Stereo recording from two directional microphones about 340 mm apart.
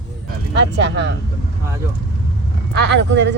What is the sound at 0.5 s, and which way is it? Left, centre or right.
Speech, right.